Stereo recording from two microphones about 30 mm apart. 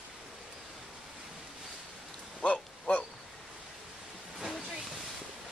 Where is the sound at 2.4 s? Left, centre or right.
Left.